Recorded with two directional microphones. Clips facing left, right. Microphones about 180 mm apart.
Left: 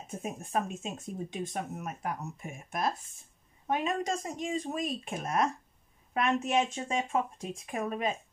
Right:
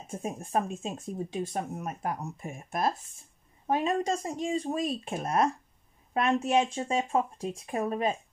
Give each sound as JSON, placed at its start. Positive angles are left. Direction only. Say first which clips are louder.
{"t": 0.2, "sound": "speech", "louder": "right 3 dB", "side_deg": -30}